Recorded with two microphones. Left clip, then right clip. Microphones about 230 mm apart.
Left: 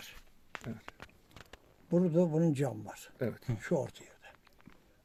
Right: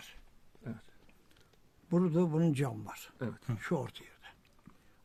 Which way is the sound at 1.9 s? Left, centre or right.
Right.